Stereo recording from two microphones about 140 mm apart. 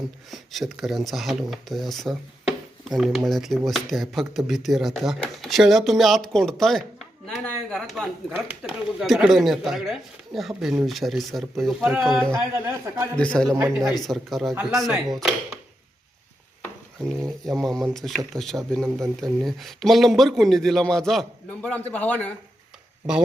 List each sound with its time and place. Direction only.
0.3 s speech: centre (ahead or behind)
12.3 s a man's voice: 20° right (ahead or behind)
13.1 s a man's voice: 5° left (ahead or behind)
13.6 s a man's voice: 20° right (ahead or behind)
14.0 s speech: centre (ahead or behind)
17.4 s speech: centre (ahead or behind)